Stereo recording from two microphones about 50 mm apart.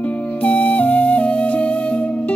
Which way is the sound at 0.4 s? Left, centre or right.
Left.